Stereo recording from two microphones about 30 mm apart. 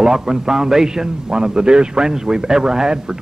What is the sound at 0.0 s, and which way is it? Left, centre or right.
A man's voice, right.